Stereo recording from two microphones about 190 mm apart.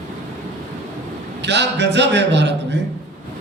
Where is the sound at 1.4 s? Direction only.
65° right (ahead or behind).